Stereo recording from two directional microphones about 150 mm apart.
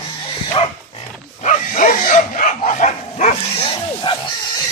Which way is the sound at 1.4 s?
55° left (ahead or behind).